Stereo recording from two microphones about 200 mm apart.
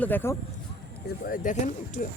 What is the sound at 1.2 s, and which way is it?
Speech, 40° left (ahead or behind).